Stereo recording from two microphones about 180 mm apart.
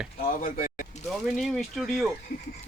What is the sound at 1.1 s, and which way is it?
Speech, centre (ahead or behind).